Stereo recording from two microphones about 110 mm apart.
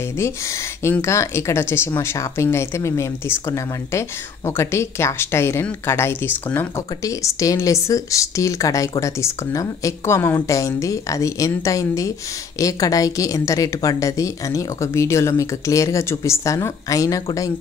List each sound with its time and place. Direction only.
1.0 s a woman's voice: 25° left (ahead or behind)